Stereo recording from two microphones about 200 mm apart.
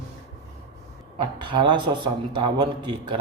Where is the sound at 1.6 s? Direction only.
25° right (ahead or behind).